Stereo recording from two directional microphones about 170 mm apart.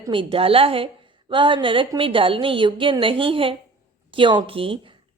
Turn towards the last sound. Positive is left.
turn(degrees=-30)  # may be behind; listen again after turning